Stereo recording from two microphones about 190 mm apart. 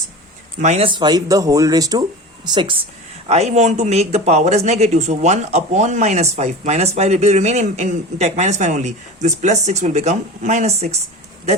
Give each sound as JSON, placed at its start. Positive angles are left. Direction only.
{"t": 0.6, "sound": "speech", "side_deg": -35}